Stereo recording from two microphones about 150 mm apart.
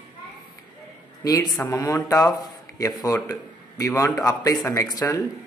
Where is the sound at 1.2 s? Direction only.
25° left (ahead or behind).